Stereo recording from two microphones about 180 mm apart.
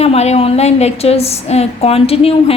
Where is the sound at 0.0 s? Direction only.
35° left (ahead or behind).